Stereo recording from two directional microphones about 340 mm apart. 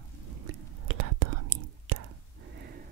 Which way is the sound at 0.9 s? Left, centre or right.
Right.